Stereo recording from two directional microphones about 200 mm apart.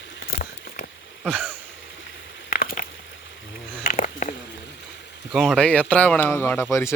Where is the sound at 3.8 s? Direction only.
40° left (ahead or behind).